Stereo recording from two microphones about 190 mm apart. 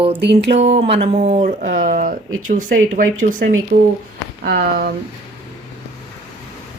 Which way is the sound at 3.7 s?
55° right (ahead or behind).